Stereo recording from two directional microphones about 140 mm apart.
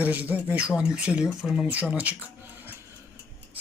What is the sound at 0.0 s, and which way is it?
Speech, 10° right (ahead or behind).